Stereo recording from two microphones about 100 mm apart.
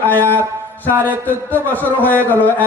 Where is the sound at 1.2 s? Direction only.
20° left (ahead or behind).